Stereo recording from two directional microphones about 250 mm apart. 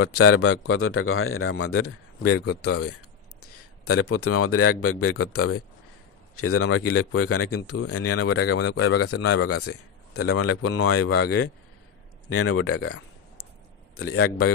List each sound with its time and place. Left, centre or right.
0.0 s a man's voice: left
12.3 s speech: left